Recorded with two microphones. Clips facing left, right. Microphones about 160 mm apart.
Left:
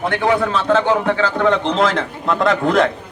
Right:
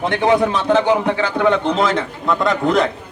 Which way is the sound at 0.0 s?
20° right (ahead or behind).